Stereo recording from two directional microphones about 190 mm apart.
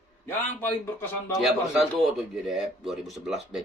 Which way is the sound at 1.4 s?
Centre (ahead or behind).